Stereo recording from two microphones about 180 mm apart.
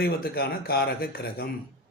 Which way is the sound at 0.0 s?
60° left (ahead or behind).